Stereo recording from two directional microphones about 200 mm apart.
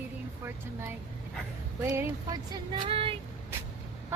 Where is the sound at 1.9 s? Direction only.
20° right (ahead or behind).